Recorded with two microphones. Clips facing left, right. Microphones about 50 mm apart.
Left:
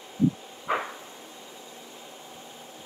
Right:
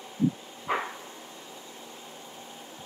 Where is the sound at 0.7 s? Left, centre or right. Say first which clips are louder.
Left 1 dB; centre.